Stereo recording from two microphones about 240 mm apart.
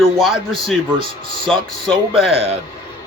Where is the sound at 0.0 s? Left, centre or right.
Centre.